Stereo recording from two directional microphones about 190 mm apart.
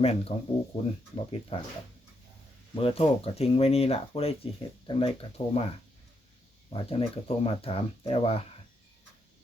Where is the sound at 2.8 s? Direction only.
30° left (ahead or behind).